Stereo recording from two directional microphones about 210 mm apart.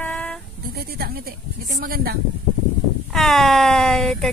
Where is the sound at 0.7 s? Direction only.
45° right (ahead or behind).